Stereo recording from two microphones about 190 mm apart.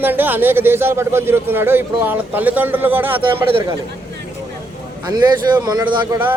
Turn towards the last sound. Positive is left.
turn(degrees=-20)  # may be behind; listen again after turning